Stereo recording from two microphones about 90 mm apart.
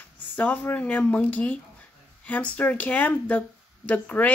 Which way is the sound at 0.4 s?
20° left (ahead or behind).